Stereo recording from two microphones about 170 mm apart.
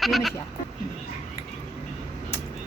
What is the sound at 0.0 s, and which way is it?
Speech, centre (ahead or behind).